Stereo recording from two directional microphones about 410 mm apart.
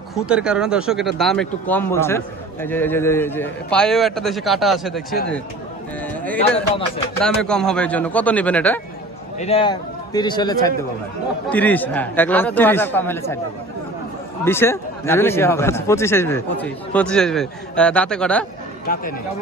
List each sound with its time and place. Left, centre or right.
0.1 s speech: centre
7.2 s a man's voice: centre
14.4 s speech: centre
18.9 s speech: left